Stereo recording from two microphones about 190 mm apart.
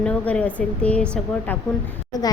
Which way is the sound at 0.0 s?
5° left (ahead or behind).